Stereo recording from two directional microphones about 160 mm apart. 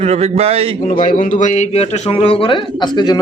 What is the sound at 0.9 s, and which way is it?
A man's voice, 50° left (ahead or behind).